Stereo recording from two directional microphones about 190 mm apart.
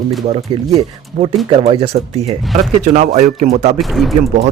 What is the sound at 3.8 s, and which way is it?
Speech, centre (ahead or behind).